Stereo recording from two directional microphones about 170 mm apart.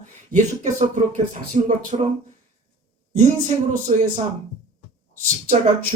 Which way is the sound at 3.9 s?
35° right (ahead or behind).